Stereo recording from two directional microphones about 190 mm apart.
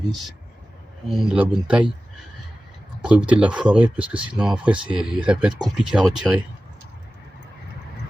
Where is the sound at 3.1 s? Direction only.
5° right (ahead or behind).